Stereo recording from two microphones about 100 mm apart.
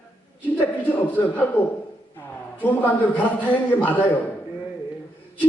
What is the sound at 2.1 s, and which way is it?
A man's voice, 15° left (ahead or behind).